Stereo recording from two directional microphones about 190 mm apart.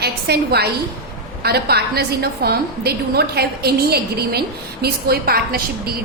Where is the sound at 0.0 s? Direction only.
55° right (ahead or behind).